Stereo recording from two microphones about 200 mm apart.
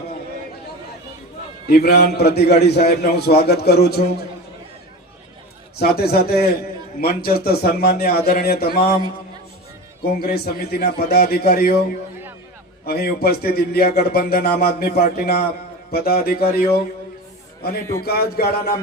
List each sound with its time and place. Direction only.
1.6 s a man's voice: 50° left (ahead or behind)
5.7 s a man's voice: 50° left (ahead or behind)
10.2 s a man's voice: 50° left (ahead or behind)
12.8 s a man's voice: 50° left (ahead or behind)
18.0 s a man's voice: 50° left (ahead or behind)